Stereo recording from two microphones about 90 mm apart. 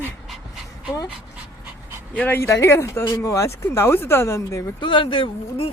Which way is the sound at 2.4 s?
30° left (ahead or behind).